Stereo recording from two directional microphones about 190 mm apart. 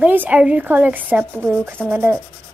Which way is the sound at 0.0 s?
10° right (ahead or behind).